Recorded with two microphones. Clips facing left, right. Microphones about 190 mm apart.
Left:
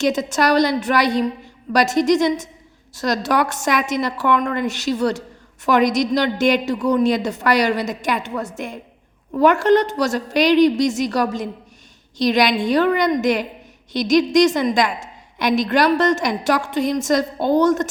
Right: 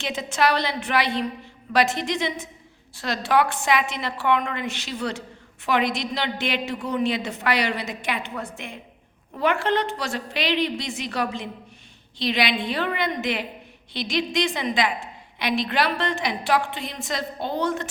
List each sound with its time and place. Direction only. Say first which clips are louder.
0.0 s a woman's voice: left 5 dB; 40° left (ahead or behind)